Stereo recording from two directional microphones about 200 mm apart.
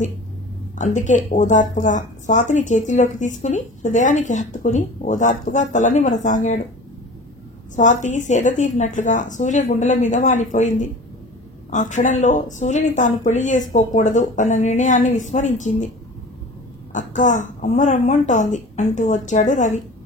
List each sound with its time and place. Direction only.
0.7 s speech: 35° left (ahead or behind)
7.7 s speech: 40° left (ahead or behind)
11.7 s speech: 40° left (ahead or behind)
16.9 s speech: 40° left (ahead or behind)